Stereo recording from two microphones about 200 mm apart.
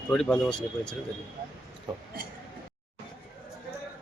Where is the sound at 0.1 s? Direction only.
5° left (ahead or behind).